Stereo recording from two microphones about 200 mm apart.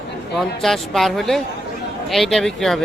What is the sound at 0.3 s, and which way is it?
Speech, centre (ahead or behind).